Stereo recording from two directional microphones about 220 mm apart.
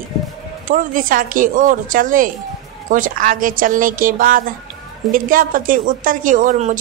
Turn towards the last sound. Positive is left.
turn(degrees=-35)  # may be behind; listen again after turning